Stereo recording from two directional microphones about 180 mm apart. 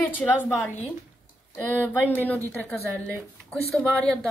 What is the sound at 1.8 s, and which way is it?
Speech, 10° left (ahead or behind).